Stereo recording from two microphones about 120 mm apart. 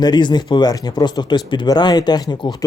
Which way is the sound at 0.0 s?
40° left (ahead or behind).